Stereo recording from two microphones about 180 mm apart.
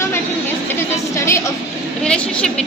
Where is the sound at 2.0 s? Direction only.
5° left (ahead or behind).